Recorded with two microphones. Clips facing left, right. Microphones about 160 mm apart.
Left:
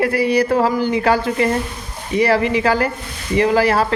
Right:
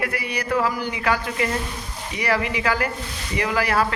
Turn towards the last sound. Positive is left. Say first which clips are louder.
# left 7 dB
turn(degrees=30)  # may be behind; listen again after turning